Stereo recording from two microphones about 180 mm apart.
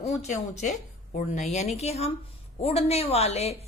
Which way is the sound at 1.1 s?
40° left (ahead or behind).